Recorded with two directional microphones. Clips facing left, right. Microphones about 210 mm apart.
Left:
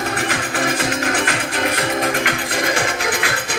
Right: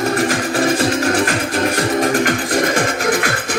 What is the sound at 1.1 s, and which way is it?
Music, 45° right (ahead or behind).